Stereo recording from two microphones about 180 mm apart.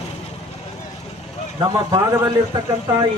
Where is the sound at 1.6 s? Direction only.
20° right (ahead or behind).